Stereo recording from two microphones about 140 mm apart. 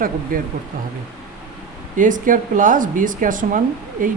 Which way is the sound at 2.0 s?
70° right (ahead or behind).